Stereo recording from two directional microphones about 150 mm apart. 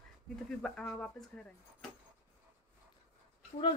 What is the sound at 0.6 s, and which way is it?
Speech, 5° left (ahead or behind).